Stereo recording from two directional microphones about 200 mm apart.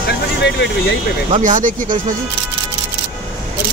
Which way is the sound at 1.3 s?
40° right (ahead or behind).